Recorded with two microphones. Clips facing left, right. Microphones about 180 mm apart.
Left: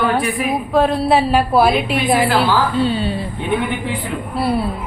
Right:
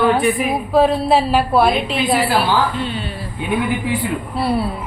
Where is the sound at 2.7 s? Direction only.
35° left (ahead or behind).